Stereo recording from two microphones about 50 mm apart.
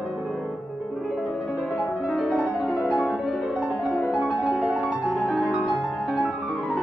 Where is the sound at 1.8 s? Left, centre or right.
Centre.